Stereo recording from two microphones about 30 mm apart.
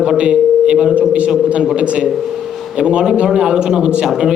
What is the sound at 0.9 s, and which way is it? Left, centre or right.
A man's voice, right.